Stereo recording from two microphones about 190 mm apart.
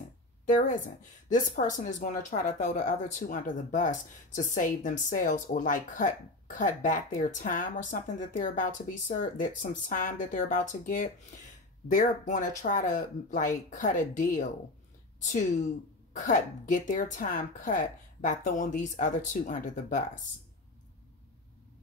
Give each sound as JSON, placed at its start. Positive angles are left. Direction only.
{"t": 0.5, "sound": "a woman's voice", "side_deg": 45}
{"t": 16.1, "sound": "a woman's voice", "side_deg": 40}